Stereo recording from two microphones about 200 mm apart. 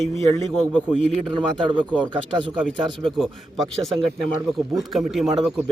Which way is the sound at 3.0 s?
Centre (ahead or behind).